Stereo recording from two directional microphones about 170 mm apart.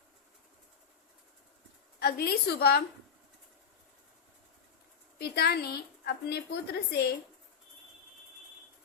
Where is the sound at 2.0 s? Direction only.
70° left (ahead or behind).